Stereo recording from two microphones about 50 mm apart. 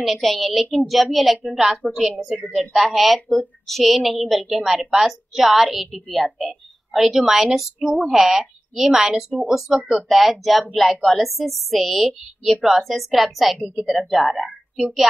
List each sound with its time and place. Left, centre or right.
0.0 s a woman's voice: centre